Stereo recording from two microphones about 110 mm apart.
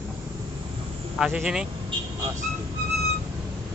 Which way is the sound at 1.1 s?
5° right (ahead or behind).